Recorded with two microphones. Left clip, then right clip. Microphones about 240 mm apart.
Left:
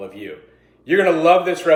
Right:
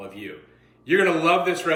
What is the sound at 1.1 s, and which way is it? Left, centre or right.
Speech, centre.